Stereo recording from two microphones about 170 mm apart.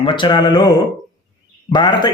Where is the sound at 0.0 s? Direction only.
30° left (ahead or behind).